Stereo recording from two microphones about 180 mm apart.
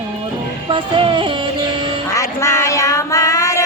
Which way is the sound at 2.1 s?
15° left (ahead or behind).